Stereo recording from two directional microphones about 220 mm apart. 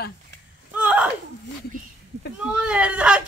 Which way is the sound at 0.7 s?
5° right (ahead or behind).